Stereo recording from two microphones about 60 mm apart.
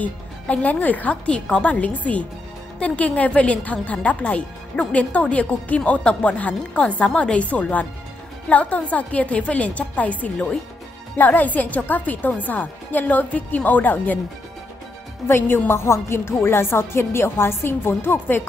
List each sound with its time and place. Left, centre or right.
0.0 s a woman's voice: left
15.2 s a woman's voice: left